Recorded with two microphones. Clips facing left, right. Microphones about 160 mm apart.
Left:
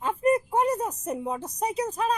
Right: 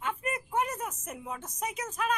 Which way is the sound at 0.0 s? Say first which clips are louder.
Left 11 dB; 35° left (ahead or behind).